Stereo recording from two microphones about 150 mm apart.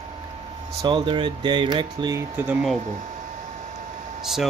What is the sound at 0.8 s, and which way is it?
Speech, 30° right (ahead or behind).